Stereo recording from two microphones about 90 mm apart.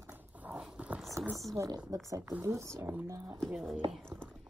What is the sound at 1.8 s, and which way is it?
Speech, 35° right (ahead or behind).